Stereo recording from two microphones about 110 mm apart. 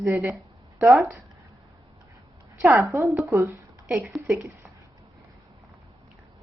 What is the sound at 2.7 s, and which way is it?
Speech, 25° right (ahead or behind).